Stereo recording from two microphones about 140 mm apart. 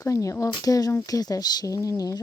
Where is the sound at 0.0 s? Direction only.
25° left (ahead or behind).